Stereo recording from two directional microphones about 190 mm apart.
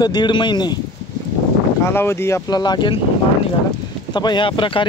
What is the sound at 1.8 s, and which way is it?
Speech, 15° left (ahead or behind).